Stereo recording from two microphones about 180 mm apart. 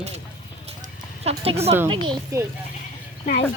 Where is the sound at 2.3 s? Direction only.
20° right (ahead or behind).